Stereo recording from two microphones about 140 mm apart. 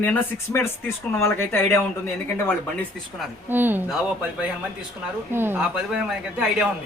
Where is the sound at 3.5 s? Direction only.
15° right (ahead or behind).